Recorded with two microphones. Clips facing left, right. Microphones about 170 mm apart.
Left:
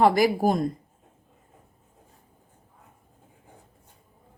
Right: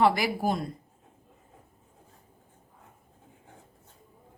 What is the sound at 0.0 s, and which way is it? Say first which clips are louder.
Speech: left 5 dB; 45° left (ahead or behind).